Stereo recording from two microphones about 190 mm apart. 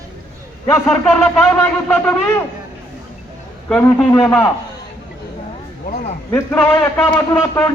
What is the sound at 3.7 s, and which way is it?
Speech, 5° left (ahead or behind).